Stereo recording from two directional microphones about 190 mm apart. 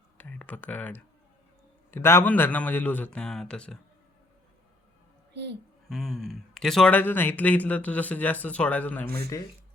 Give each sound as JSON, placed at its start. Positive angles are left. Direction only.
{"t": 0.2, "sound": "speech", "side_deg": 10}
{"t": 5.3, "sound": "a sound", "side_deg": -65}
{"t": 5.9, "sound": "speech", "side_deg": 0}